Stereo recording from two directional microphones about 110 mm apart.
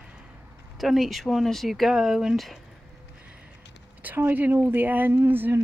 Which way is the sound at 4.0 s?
15° right (ahead or behind).